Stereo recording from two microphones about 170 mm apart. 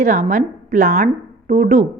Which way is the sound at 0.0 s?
45° right (ahead or behind).